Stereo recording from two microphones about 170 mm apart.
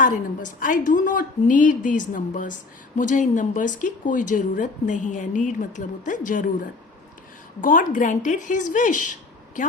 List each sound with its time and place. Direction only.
0.0 s a woman's voice: 50° left (ahead or behind)
7.6 s a woman's voice: 50° left (ahead or behind)